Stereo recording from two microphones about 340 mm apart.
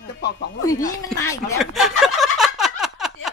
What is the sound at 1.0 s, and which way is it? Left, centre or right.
Turkey, centre.